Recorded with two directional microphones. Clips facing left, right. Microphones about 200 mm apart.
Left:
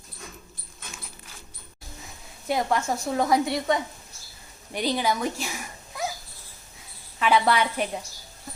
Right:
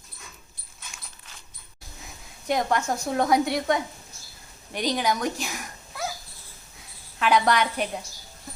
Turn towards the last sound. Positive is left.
turn(degrees=5)  # may be behind; listen again after turning